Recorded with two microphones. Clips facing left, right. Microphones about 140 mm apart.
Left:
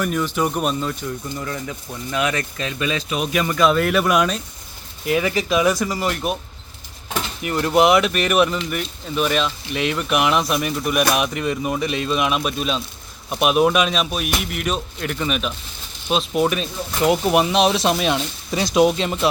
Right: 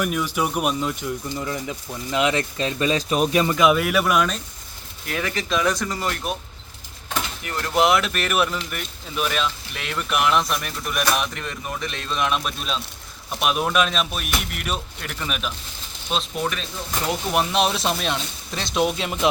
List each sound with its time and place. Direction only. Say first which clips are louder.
0.0 s speech: left 2 dB; 10° right (ahead or behind); by 3.4 s 40° right (ahead or behind)
3.4 s speech: left 1 dB; 15° right (ahead or behind); by 6.3 s 5° left (ahead or behind)
7.4 s speech: left 7 dB; 15° left (ahead or behind)
7.8 s speech: left 4 dB; centre (ahead or behind)
17.5 s speech: left 4 dB; centre (ahead or behind)
19.2 s speech: even; 20° right (ahead or behind)